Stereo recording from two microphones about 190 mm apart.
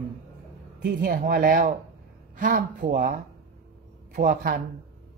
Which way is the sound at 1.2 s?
50° right (ahead or behind).